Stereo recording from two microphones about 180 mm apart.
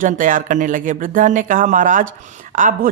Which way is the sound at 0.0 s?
50° right (ahead or behind).